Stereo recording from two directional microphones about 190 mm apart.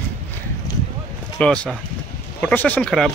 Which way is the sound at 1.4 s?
5° left (ahead or behind).